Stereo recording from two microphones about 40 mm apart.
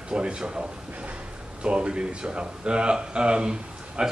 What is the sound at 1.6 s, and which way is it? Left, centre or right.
Speech, right.